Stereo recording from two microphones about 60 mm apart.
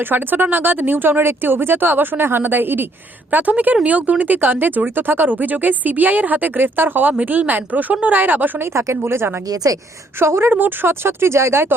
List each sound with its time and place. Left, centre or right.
0.0 s speech: right
8.6 s speech: right
9.6 s a woman's voice: right
10.2 s speech: right
10.5 s speech: right